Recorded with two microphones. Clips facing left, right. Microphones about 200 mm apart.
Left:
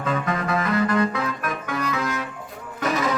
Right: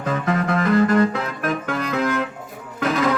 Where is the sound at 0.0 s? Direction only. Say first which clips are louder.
Right 3 dB; 50° right (ahead or behind).